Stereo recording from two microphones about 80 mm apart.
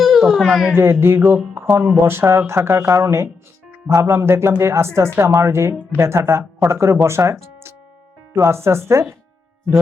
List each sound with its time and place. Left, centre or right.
0.0 s speech: centre
0.8 s speech: right